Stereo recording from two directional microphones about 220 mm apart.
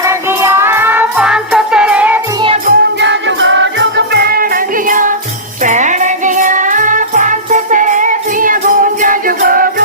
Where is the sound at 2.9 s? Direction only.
55° right (ahead or behind).